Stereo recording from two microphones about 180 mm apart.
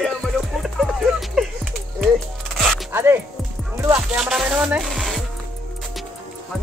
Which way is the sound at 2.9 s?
15° right (ahead or behind).